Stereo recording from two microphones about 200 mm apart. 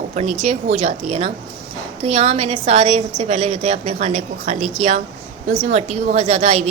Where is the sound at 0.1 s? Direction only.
35° right (ahead or behind).